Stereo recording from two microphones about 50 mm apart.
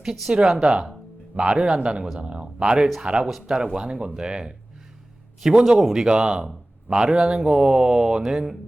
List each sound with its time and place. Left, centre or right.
0.0 s speech: centre
1.8 s speech: centre
2.7 s speech: centre
3.0 s speech: centre
5.8 s speech: centre